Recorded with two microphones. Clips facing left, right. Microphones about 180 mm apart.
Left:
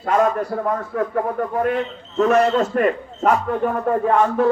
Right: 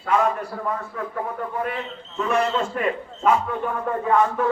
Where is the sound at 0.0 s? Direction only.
45° left (ahead or behind).